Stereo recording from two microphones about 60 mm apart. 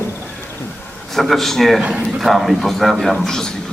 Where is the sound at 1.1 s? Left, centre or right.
Centre.